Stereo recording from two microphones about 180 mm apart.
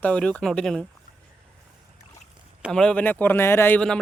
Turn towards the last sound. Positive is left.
turn(degrees=5)  # may be behind; listen again after turning